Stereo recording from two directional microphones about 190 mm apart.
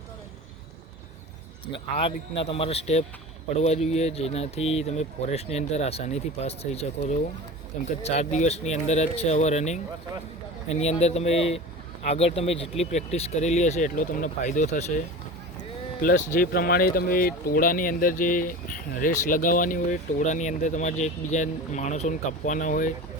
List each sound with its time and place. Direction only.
1.6 s speech: 30° left (ahead or behind); by 22.9 s 45° left (ahead or behind)